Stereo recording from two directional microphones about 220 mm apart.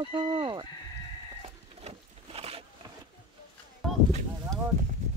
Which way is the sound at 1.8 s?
25° right (ahead or behind).